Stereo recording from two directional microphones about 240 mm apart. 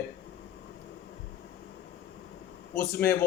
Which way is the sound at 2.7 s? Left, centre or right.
Left.